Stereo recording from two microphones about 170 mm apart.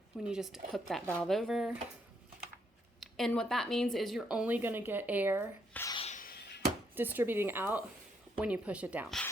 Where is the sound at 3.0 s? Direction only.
Centre (ahead or behind).